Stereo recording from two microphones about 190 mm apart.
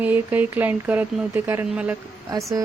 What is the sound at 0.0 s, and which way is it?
Speech, 10° right (ahead or behind).